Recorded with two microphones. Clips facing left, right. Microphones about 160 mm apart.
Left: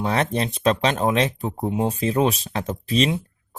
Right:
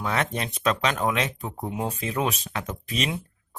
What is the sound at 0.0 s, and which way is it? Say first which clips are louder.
Speech: left 5 dB; 30° left (ahead or behind).